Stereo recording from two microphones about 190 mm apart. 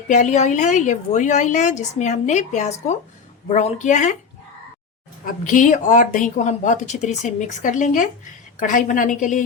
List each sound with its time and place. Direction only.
0.1 s speech: 40° left (ahead or behind)
5.2 s a woman's voice: 45° left (ahead or behind)